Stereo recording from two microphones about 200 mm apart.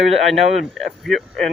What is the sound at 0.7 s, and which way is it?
Speech, centre (ahead or behind).